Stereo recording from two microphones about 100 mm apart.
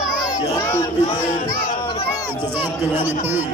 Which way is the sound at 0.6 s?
30° left (ahead or behind).